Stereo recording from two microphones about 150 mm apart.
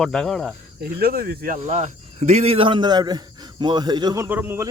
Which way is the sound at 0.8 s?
90° right.